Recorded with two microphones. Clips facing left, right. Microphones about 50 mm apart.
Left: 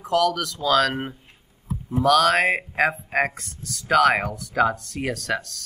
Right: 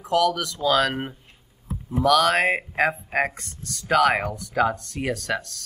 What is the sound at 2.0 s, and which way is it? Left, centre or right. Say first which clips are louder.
Speech: left 1 dB; centre.